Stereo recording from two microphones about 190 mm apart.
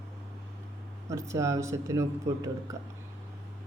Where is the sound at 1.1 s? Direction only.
15° right (ahead or behind).